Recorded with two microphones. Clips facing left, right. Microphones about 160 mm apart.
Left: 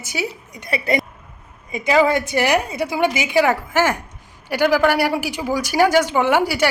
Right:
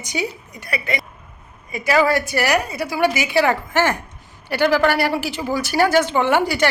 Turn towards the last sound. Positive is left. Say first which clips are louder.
# even
turn(degrees=10)  # may be behind; listen again after turning